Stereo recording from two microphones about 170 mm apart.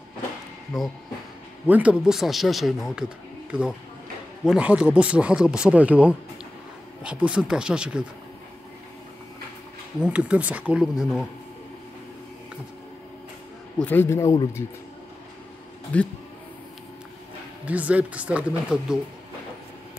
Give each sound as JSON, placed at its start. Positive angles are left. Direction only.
{"t": 0.7, "sound": "speech", "side_deg": 0}
{"t": 4.5, "sound": "speech", "side_deg": -5}
{"t": 9.9, "sound": "speech", "side_deg": -5}
{"t": 13.7, "sound": "a man's voice", "side_deg": 10}
{"t": 15.9, "sound": "a man's voice", "side_deg": 10}
{"t": 17.6, "sound": "speech", "side_deg": -10}